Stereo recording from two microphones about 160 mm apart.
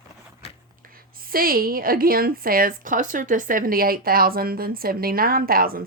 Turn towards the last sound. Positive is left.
turn(degrees=-65)  # may be behind; listen again after turning